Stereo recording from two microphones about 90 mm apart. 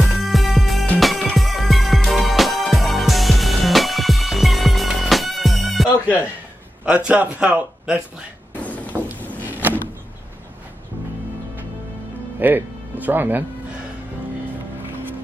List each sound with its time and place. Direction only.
0.0 s music: centre (ahead or behind)
6.8 s a man's voice: 10° right (ahead or behind)
8.6 s a sound: 15° left (ahead or behind)
9.6 s vehicle: 20° right (ahead or behind)
12.4 s speech: 20° right (ahead or behind)